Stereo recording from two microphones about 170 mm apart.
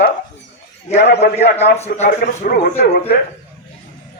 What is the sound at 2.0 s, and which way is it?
A man's voice, 60° left (ahead or behind).